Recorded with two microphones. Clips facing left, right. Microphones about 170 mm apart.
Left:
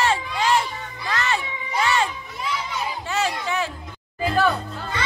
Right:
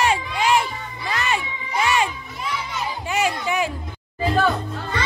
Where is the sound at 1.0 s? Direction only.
15° right (ahead or behind).